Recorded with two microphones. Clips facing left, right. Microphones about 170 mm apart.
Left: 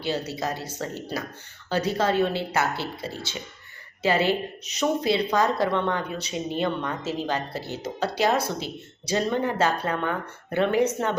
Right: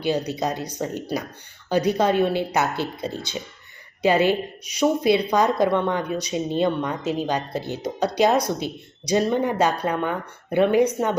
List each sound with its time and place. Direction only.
0.0 s a woman's voice: 15° right (ahead or behind)